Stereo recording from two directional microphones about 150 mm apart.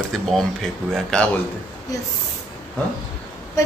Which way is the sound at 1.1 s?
5° left (ahead or behind).